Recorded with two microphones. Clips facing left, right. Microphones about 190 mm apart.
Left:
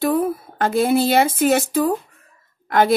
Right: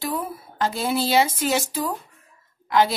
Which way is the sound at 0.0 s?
55° left (ahead or behind).